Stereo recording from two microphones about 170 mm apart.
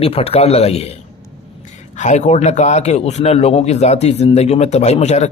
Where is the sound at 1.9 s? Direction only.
45° left (ahead or behind).